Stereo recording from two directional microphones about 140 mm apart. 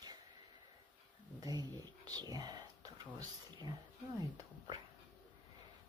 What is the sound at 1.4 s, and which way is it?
Speech, 25° right (ahead or behind).